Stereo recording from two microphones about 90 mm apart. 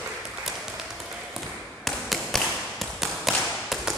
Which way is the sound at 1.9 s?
5° left (ahead or behind).